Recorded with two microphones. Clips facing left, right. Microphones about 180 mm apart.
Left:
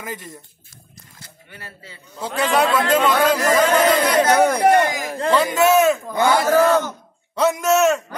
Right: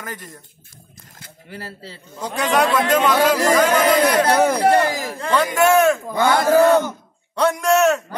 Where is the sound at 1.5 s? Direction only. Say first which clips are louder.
Right 7 dB; 35° right (ahead or behind).